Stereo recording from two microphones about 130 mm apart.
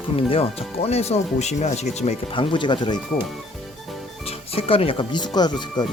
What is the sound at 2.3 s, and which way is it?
Speech, 40° left (ahead or behind).